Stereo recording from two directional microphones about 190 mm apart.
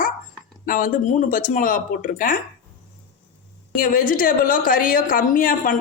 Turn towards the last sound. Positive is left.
turn(degrees=45)  # may be behind; listen again after turning